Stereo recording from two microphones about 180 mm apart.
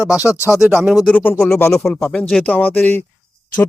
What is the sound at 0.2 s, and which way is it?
Speech, 15° left (ahead or behind).